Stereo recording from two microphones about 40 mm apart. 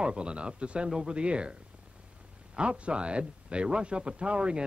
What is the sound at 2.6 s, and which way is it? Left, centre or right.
Speech, right.